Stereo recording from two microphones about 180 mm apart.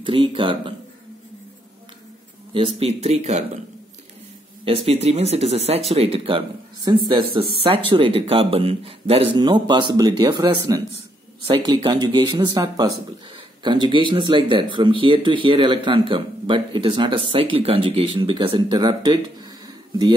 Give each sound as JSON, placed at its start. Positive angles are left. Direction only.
{"t": 0.0, "sound": "speech", "side_deg": -30}
{"t": 2.5, "sound": "speech", "side_deg": -30}
{"t": 4.6, "sound": "speech", "side_deg": -30}